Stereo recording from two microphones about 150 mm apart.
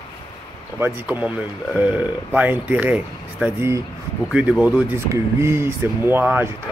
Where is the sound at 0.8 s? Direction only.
10° right (ahead or behind).